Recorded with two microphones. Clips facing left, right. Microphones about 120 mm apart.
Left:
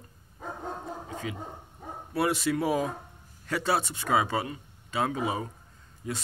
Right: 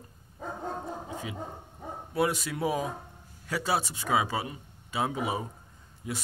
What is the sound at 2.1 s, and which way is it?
A man's voice, centre (ahead or behind).